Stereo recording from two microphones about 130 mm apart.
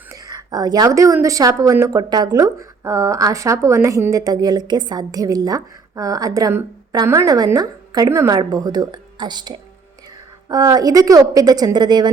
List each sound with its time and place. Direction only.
0.1 s a woman's voice: 30° right (ahead or behind)